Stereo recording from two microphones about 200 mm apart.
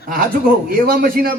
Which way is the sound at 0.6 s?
45° right (ahead or behind).